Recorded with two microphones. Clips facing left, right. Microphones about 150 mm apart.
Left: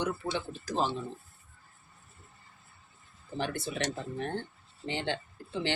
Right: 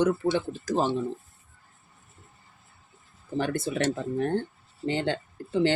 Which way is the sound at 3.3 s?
50° right (ahead or behind).